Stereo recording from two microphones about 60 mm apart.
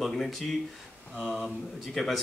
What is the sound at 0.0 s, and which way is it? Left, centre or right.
A man's voice, centre.